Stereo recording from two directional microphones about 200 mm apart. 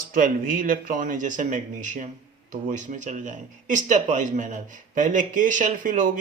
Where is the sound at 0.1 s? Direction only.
40° right (ahead or behind).